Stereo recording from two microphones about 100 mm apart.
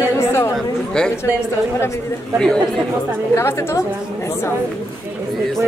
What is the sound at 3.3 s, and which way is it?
A woman's voice, 25° left (ahead or behind).